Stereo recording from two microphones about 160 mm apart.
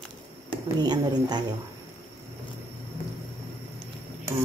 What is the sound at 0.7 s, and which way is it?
Speech, 25° right (ahead or behind).